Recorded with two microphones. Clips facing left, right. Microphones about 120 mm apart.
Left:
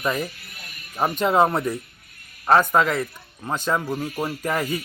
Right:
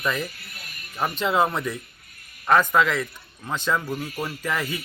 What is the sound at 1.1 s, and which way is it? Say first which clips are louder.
A man's voice: left 3 dB; 45° left (ahead or behind).